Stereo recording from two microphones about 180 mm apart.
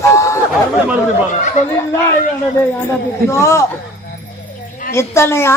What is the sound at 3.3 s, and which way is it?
Speech, 15° left (ahead or behind).